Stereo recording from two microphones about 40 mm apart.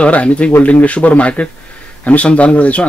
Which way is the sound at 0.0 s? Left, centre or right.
Left.